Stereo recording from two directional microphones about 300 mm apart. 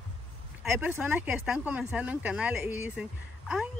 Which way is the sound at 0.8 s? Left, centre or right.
Centre.